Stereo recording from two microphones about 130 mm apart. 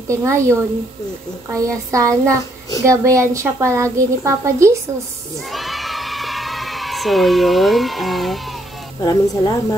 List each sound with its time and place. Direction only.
0.1 s a woman's voice: 25° right (ahead or behind)
1.5 s a woman's voice: 25° right (ahead or behind)
5.5 s a sound: centre (ahead or behind)
9.0 s speech: 30° left (ahead or behind)